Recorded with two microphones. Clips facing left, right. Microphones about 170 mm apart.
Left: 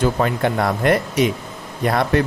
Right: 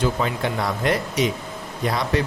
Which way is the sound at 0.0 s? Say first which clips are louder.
Left 4 dB; 55° left (ahead or behind).